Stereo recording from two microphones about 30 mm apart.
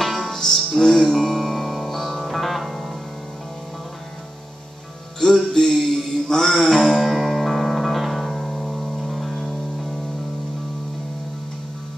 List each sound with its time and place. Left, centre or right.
0.0 s music: centre
0.3 s music: centre
1.1 s music: centre
5.3 s music: centre